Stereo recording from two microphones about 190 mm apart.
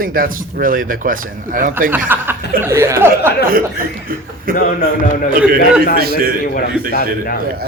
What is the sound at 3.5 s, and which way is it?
Speech, 50° right (ahead or behind).